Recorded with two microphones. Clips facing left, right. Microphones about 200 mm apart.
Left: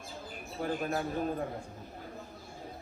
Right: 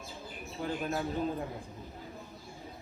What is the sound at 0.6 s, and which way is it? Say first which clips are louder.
Speech: left 1 dB; 50° left (ahead or behind).